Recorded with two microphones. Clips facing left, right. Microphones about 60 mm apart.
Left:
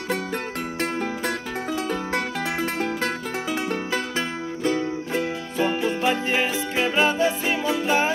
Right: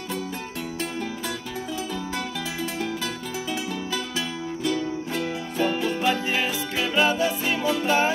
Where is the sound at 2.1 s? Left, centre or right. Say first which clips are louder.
Left 5 dB; left.